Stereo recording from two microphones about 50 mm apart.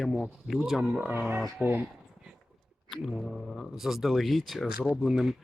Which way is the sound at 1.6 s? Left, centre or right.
Right.